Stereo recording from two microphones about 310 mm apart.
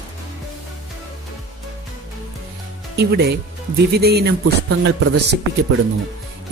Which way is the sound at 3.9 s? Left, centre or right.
Right.